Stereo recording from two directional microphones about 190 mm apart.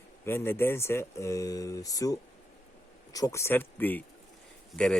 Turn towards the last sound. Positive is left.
turn(degrees=5)  # may be behind; listen again after turning